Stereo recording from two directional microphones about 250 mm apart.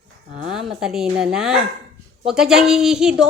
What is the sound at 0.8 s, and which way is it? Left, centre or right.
A woman's voice, centre.